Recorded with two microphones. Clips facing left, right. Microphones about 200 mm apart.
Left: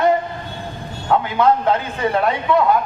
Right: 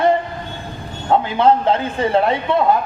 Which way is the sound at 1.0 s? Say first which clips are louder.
Right 2 dB; 25° right (ahead or behind).